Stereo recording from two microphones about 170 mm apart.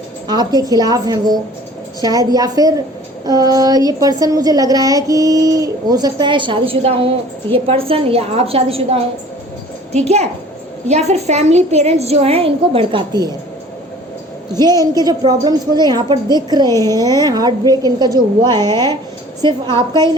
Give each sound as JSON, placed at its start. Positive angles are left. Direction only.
{"t": 0.3, "sound": "a woman's voice", "side_deg": -25}
{"t": 14.5, "sound": "a woman's voice", "side_deg": -25}